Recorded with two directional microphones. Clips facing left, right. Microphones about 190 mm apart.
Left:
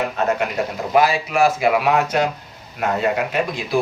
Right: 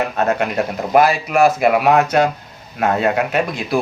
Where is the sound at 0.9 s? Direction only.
60° right (ahead or behind).